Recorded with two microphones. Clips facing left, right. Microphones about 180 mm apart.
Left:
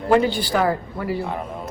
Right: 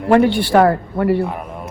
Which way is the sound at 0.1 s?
60° right (ahead or behind).